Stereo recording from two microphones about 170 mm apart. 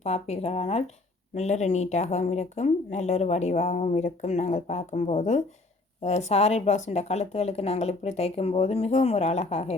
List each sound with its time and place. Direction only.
0.0 s speech: 40° left (ahead or behind)